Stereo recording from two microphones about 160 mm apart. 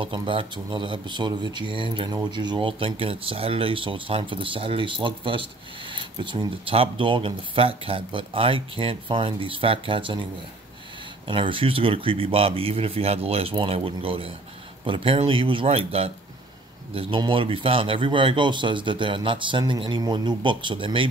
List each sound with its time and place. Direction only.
0.0 s speech: 30° right (ahead or behind)
11.2 s speech: 30° right (ahead or behind)